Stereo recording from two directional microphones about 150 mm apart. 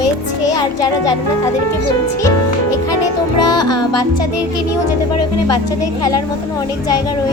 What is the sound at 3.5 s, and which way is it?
Speech, 25° left (ahead or behind).